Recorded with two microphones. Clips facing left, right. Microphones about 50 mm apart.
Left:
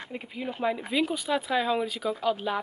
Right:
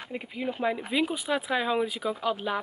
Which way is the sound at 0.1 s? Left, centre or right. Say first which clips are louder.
Right 3 dB; centre.